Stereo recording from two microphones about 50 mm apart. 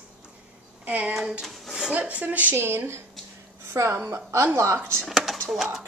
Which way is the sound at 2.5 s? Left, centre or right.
Right.